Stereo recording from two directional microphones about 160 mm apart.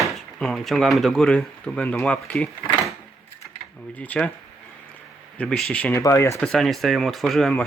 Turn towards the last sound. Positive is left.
turn(degrees=0)  # may be behind; listen again after turning